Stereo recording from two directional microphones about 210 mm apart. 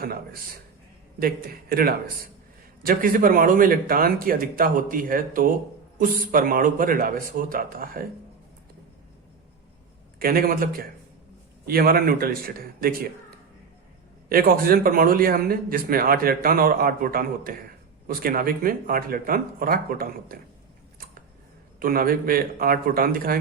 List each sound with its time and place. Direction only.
1.2 s a man's voice: 45° right (ahead or behind)
10.2 s a man's voice: 45° right (ahead or behind)
14.3 s a man's voice: 45° right (ahead or behind)
21.8 s a man's voice: 45° right (ahead or behind)